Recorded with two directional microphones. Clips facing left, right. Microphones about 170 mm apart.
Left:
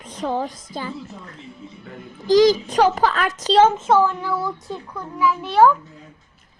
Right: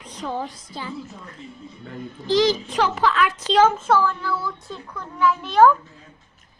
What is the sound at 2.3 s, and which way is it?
A woman's voice, 40° left (ahead or behind).